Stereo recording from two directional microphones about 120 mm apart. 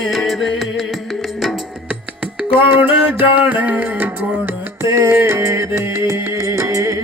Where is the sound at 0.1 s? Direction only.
Centre (ahead or behind).